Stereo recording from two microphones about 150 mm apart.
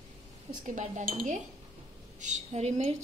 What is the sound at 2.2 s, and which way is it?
Speech, 50° right (ahead or behind).